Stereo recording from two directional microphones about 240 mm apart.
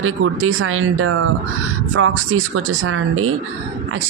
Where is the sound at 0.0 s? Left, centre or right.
Right.